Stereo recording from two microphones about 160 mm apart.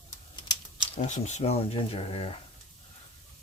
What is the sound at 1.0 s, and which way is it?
Speech, 45° left (ahead or behind).